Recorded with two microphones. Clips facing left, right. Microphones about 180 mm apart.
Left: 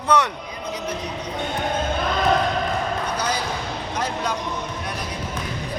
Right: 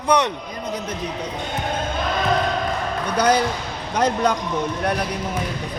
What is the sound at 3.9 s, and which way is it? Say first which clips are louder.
Speech: right 8 dB; 60° right (ahead or behind).